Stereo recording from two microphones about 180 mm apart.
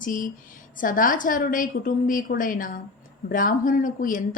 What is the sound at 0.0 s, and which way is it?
A woman's voice, 50° left (ahead or behind).